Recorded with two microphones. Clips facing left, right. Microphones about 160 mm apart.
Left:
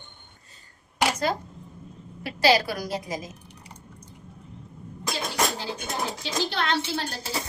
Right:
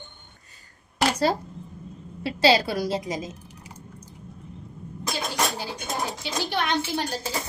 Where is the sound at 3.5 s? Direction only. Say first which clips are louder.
Right 2 dB; 5° right (ahead or behind).